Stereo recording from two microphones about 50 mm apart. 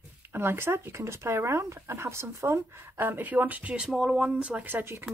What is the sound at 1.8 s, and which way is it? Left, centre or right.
Speech, right.